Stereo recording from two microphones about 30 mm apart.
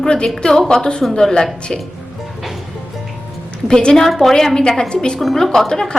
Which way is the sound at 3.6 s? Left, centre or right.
Left.